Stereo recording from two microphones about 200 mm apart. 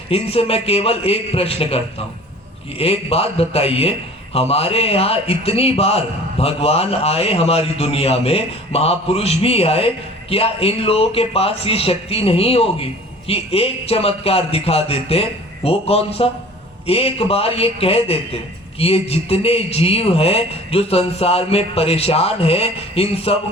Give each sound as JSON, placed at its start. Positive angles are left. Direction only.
{"t": 0.1, "sound": "a man's voice", "side_deg": 30}